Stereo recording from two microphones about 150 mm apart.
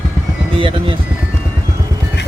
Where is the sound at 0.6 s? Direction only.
35° right (ahead or behind).